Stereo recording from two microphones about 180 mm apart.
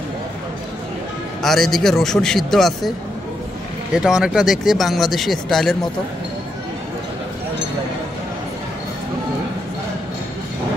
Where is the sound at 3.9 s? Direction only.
5° right (ahead or behind).